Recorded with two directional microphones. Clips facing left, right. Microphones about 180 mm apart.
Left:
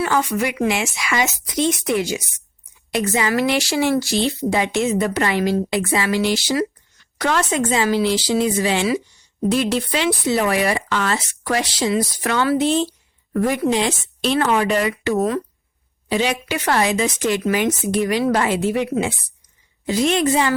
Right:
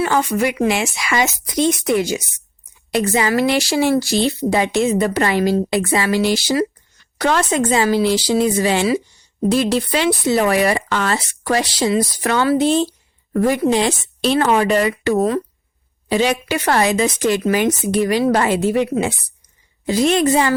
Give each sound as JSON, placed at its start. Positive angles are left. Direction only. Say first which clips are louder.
{"t": 0.0, "sound": "speech", "louder": "right 3 dB", "side_deg": -30}